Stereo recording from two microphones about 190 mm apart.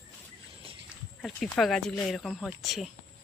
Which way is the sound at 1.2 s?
Centre (ahead or behind).